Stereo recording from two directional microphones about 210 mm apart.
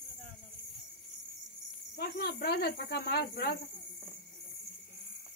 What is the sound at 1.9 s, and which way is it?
Speech, 50° left (ahead or behind).